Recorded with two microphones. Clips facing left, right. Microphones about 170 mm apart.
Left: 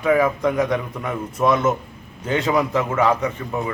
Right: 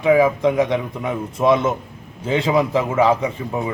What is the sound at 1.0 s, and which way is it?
A man's voice, 25° right (ahead or behind).